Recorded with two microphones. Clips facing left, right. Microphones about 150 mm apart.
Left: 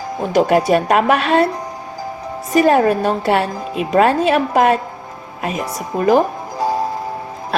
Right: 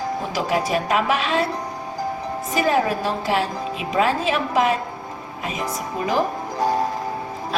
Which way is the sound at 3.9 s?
50° left (ahead or behind).